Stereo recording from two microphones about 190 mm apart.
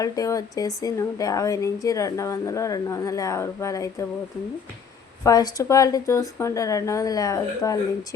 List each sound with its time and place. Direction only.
0.0 s speech: 20° left (ahead or behind)
5.2 s speech: 20° left (ahead or behind)